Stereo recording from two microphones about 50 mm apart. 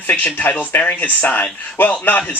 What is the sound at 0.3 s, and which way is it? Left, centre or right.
A man's voice, left.